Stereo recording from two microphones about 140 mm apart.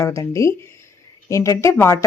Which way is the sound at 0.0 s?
20° left (ahead or behind).